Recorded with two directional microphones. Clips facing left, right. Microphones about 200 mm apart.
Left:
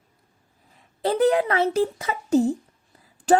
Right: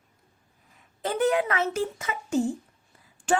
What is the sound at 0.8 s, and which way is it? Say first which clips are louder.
A child's voice: left 5 dB; 35° left (ahead or behind).